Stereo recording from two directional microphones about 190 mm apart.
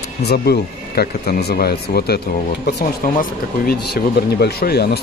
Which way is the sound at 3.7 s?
55° left (ahead or behind).